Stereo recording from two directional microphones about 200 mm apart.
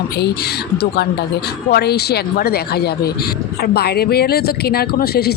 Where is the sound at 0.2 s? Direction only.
55° left (ahead or behind).